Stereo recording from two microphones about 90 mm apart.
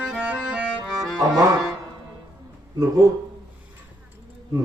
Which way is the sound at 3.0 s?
40° right (ahead or behind).